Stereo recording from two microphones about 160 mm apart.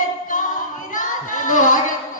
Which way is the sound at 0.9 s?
55° left (ahead or behind).